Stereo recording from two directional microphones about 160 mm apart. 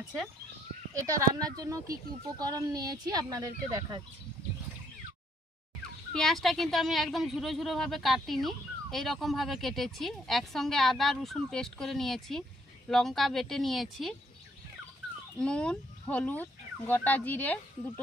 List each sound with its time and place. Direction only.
0.9 s speech: 20° right (ahead or behind)
6.1 s speech: centre (ahead or behind)
15.3 s speech: 5° left (ahead or behind)